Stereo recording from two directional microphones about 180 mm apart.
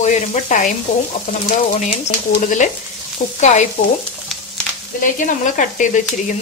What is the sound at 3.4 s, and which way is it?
Frying, 40° left (ahead or behind).